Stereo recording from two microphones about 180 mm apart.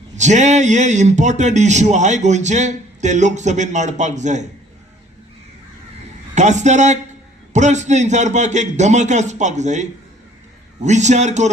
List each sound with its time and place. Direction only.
0.2 s a man's voice: 40° right (ahead or behind)
6.3 s a man's voice: 40° right (ahead or behind)